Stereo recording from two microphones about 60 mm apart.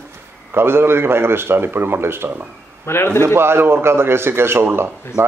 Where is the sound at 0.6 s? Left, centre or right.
Right.